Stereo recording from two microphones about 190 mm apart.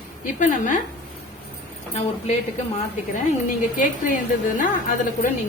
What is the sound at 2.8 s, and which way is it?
A woman's voice, 40° left (ahead or behind).